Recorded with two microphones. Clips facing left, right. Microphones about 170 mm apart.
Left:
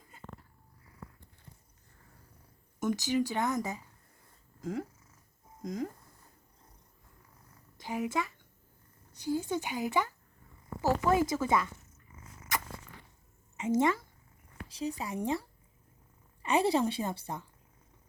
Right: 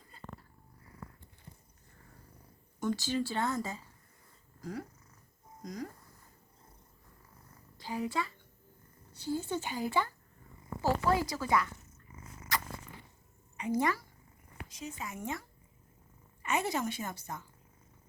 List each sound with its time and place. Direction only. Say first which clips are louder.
2.8 s speech: left 3 dB; 15° left (ahead or behind)
7.8 s speech: left 2 dB; 15° left (ahead or behind)
13.6 s speech: left 3 dB; 20° left (ahead or behind)
14.7 s a woman's voice: left 7 dB; 35° left (ahead or behind)